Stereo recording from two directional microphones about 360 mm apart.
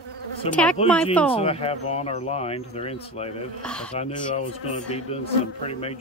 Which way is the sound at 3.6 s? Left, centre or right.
Centre.